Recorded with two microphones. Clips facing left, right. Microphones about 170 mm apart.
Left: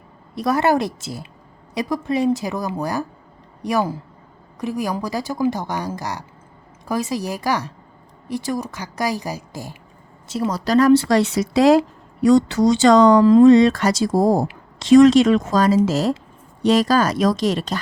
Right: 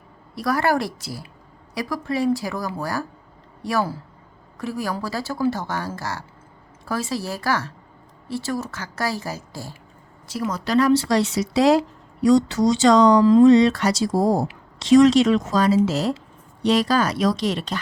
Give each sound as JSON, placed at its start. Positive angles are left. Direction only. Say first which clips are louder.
{"t": 0.3, "sound": "a woman's voice", "louder": "left 3 dB", "side_deg": 20}
{"t": 10.7, "sound": "speech", "louder": "left 4 dB", "side_deg": 45}